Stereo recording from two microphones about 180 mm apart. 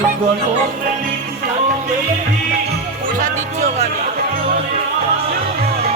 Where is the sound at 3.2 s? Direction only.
45° right (ahead or behind).